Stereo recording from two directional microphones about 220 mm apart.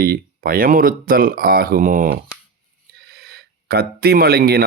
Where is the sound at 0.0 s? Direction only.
40° right (ahead or behind).